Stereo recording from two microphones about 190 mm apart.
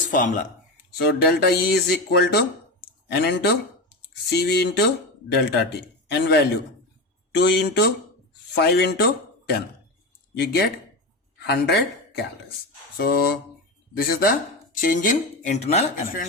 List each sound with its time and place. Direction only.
0.1 s speech: 45° left (ahead or behind)
0.9 s speech: 55° left (ahead or behind)
10.4 s speech: 55° left (ahead or behind)
13.0 s speech: 55° left (ahead or behind)